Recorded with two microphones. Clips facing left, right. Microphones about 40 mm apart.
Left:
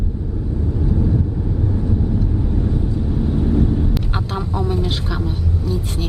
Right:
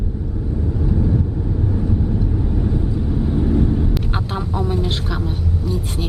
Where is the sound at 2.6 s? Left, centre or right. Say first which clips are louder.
Even; centre.